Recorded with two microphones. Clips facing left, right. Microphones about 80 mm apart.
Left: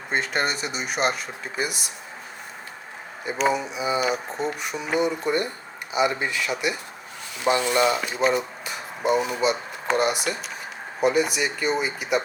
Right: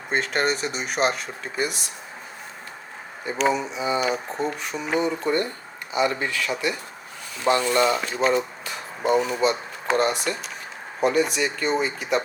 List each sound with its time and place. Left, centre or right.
0.1 s speech: centre
3.3 s speech: centre